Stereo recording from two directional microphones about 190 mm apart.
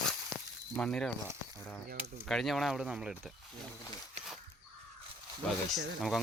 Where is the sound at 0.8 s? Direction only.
5° left (ahead or behind).